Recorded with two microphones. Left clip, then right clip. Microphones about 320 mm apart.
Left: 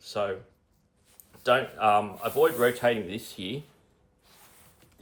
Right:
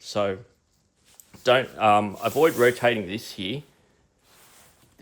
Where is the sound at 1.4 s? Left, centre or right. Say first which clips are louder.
Right 4 dB; right.